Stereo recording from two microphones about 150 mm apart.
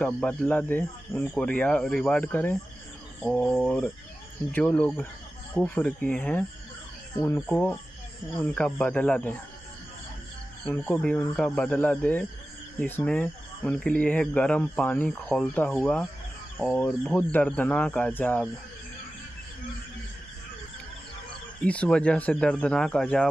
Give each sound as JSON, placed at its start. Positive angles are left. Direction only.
{"t": 0.0, "sound": "speech", "side_deg": 10}
{"t": 3.2, "sound": "a sound", "side_deg": 0}
{"t": 4.5, "sound": "speech", "side_deg": 10}
{"t": 10.9, "sound": "speech", "side_deg": 10}
{"t": 21.6, "sound": "speech", "side_deg": 5}